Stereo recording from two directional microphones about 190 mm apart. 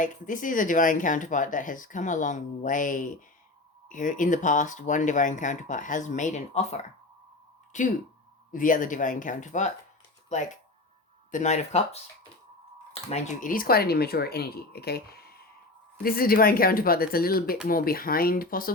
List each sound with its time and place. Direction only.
0.0 s speech: 45° left (ahead or behind)
13.1 s speech: 40° left (ahead or behind)